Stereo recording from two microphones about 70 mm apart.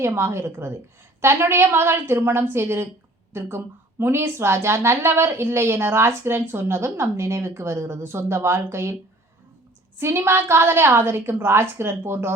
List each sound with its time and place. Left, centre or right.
0.2 s a woman's voice: right
10.0 s a woman's voice: right